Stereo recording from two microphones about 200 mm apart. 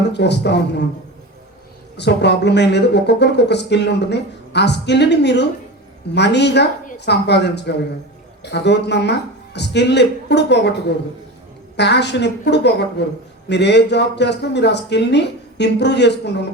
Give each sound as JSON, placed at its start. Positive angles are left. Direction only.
{"t": 0.1, "sound": "speech", "side_deg": 60}
{"t": 2.0, "sound": "speech", "side_deg": 60}